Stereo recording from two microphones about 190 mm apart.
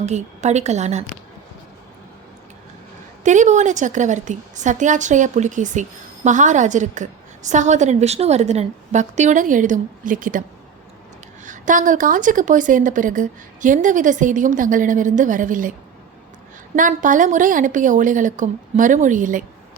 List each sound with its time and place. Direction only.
0.0 s a woman's voice: 35° right (ahead or behind)
3.2 s a woman's voice: 40° right (ahead or behind)
11.4 s a woman's voice: 40° right (ahead or behind)
16.7 s a woman's voice: 45° right (ahead or behind)